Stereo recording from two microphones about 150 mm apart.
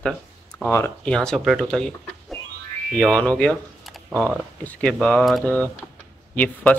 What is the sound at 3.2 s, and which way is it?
Speech, 10° left (ahead or behind).